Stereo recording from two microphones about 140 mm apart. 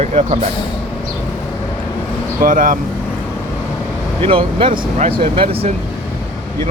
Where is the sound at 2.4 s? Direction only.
75° right (ahead or behind).